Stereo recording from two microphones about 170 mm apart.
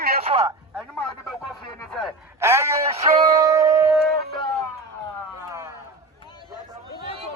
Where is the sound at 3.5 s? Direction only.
20° right (ahead or behind).